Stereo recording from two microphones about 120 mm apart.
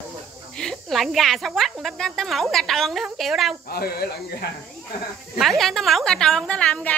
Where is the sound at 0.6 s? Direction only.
5° left (ahead or behind).